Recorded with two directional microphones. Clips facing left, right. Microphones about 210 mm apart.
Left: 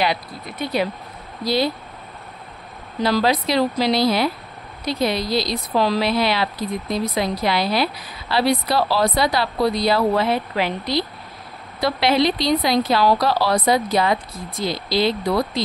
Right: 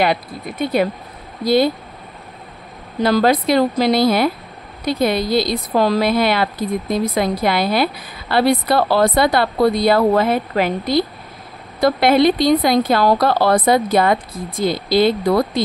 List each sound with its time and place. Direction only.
0.0 s a woman's voice: 55° right (ahead or behind)
3.0 s a woman's voice: 50° right (ahead or behind)